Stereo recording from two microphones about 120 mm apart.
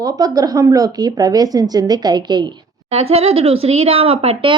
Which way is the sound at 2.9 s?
55° right (ahead or behind).